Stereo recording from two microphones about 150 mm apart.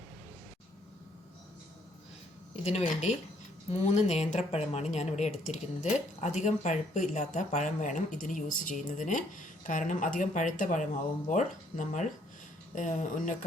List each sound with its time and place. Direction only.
2.6 s a woman's voice: 45° left (ahead or behind)